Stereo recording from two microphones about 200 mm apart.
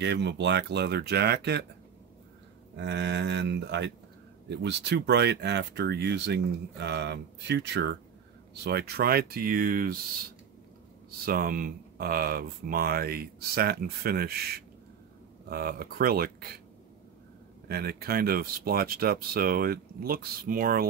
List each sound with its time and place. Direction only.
0.0 s speech: 60° right (ahead or behind)
2.7 s speech: 60° right (ahead or behind)
11.1 s speech: 45° right (ahead or behind)
17.6 s speech: 50° right (ahead or behind)